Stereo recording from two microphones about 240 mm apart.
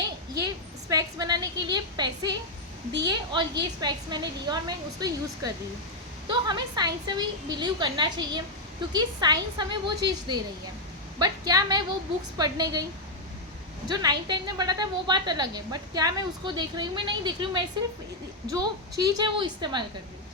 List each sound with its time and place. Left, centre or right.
0.0 s a sound: centre
3.1 s a woman's voice: centre
13.8 s a woman's voice: centre